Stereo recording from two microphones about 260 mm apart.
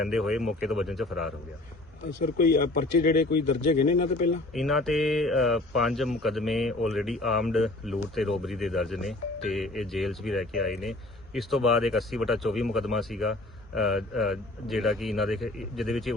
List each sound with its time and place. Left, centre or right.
0.0 s speech: centre
2.2 s speech: left
4.5 s speech: centre